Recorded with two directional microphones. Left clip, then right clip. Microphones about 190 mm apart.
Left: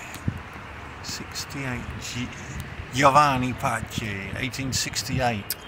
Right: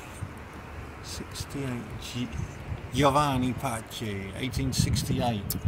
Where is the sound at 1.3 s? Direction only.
Centre (ahead or behind).